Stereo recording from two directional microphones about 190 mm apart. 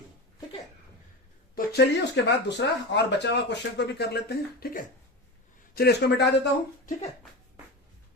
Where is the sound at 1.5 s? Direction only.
60° left (ahead or behind).